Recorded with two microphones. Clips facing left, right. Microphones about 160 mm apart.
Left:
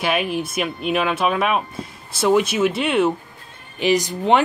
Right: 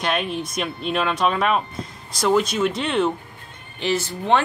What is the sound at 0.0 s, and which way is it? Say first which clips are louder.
Speech: left 3 dB; 5° left (ahead or behind).